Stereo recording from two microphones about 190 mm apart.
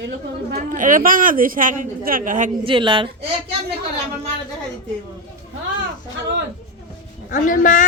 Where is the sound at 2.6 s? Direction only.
25° right (ahead or behind).